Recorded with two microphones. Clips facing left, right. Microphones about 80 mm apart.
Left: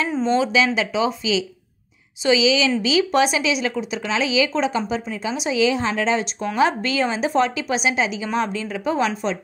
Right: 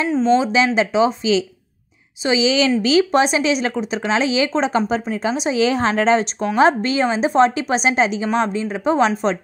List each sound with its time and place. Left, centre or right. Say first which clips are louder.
0.2 s a woman's voice: right 3 dB; right
3.2 s a woman's voice: right 2 dB; right